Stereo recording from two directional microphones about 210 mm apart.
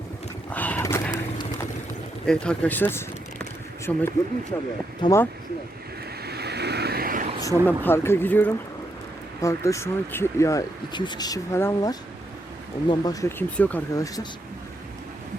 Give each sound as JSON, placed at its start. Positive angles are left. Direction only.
{"t": 0.5, "sound": "a sound", "side_deg": 10}
{"t": 2.2, "sound": "speech", "side_deg": 5}
{"t": 6.2, "sound": "vehicle", "side_deg": -50}
{"t": 7.4, "sound": "speech", "side_deg": 10}